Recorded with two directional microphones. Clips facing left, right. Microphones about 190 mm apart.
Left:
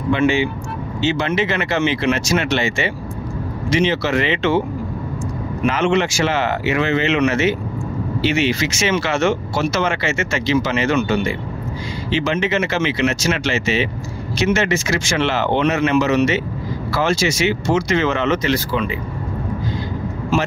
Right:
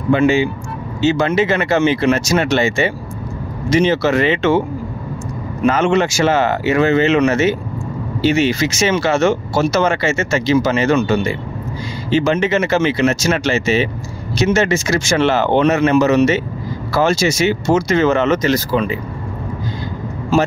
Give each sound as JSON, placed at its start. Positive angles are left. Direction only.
{"t": 0.1, "sound": "speech", "side_deg": -40}
{"t": 5.7, "sound": "speech", "side_deg": -45}
{"t": 12.1, "sound": "speech", "side_deg": -45}